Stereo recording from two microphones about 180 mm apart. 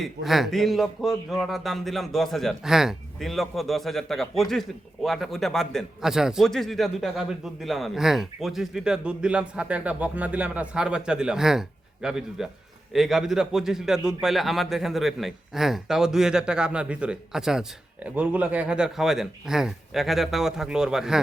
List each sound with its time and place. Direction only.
0.0 s a man's voice: centre (ahead or behind)